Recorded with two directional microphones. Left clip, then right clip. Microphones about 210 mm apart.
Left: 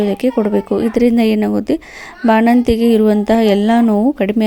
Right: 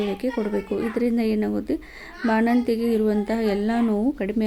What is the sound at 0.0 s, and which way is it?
Speech, 35° left (ahead or behind).